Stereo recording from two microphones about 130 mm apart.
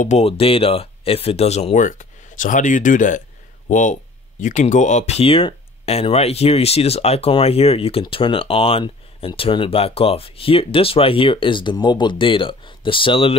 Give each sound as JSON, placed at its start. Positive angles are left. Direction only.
{"t": 0.2, "sound": "speech", "side_deg": 45}